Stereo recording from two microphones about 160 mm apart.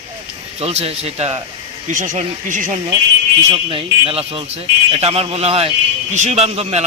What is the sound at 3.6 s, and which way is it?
A man's voice, 35° right (ahead or behind).